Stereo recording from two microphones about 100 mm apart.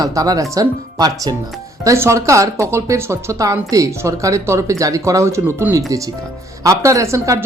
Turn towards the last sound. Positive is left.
turn(degrees=-30)  # may be behind; listen again after turning